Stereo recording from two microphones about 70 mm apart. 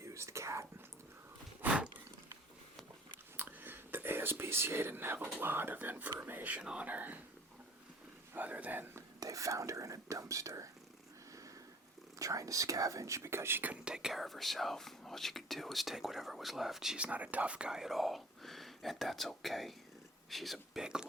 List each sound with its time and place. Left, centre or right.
0.0 s whispering: right
3.3 s speech: right
6.6 s speech: centre
6.8 s speech: right
8.3 s a man's voice: right
9.2 s speech: right
12.2 s speech: right
13.8 s speech: centre
17.0 s speech: right; by 20.8 s centre
20.8 s speech: centre